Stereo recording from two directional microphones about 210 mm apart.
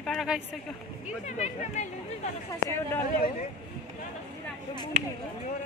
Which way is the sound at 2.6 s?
10° left (ahead or behind).